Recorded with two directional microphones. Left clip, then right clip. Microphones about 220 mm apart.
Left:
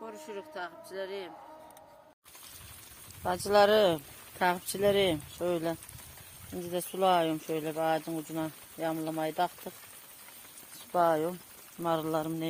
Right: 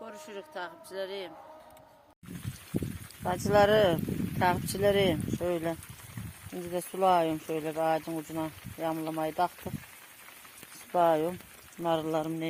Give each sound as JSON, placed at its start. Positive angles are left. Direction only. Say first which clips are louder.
{"t": 0.3, "sound": "speech", "louder": "even", "side_deg": -50}
{"t": 3.2, "sound": "speech", "louder": "even", "side_deg": -5}
{"t": 10.9, "sound": "speech", "louder": "right 2 dB", "side_deg": -15}